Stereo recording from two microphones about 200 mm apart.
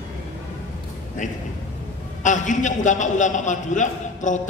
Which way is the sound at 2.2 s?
40° left (ahead or behind).